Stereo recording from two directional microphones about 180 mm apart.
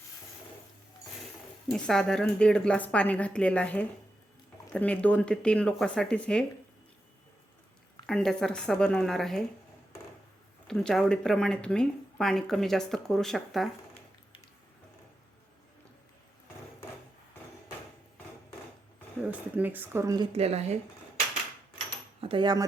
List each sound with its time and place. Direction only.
1.2 s speech: centre (ahead or behind)
8.0 s speech: 5° left (ahead or behind)
10.7 s speech: 5° left (ahead or behind)
19.2 s speech: 10° right (ahead or behind)
20.3 s speech: 35° right (ahead or behind)
22.2 s speech: 30° right (ahead or behind)